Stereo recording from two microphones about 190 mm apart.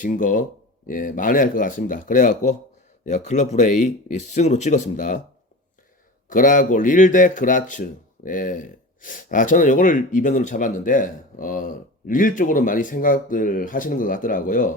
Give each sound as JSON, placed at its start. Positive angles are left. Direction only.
{"t": 0.0, "sound": "speech", "side_deg": 45}
{"t": 6.2, "sound": "speech", "side_deg": 45}